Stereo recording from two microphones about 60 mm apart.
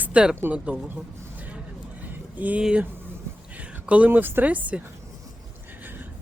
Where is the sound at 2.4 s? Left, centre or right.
Right.